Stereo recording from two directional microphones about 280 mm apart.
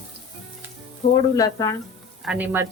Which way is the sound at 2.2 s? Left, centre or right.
Centre.